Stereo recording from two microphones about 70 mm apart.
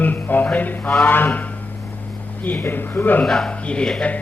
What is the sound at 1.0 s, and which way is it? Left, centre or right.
Speech, left.